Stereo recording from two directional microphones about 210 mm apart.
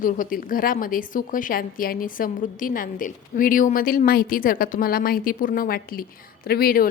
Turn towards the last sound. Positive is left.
turn(degrees=45)  # may be behind; listen again after turning